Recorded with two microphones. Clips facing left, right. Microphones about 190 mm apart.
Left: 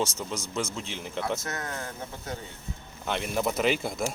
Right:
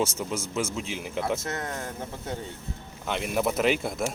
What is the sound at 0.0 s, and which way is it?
Speech, 10° right (ahead or behind).